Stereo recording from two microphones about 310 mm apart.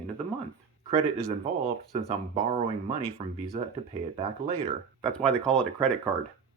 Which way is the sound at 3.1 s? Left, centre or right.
Centre.